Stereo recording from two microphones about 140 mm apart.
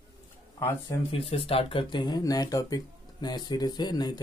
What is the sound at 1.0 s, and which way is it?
Speech, 40° left (ahead or behind).